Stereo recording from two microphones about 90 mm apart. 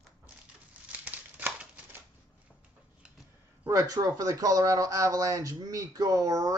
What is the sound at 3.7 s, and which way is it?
Speech, 45° right (ahead or behind).